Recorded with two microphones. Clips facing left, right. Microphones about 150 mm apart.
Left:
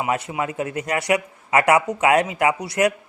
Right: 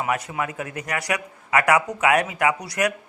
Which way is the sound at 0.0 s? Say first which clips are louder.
Left 2 dB; 25° left (ahead or behind).